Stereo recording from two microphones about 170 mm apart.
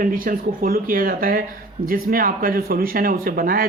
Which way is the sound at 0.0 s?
55° right (ahead or behind).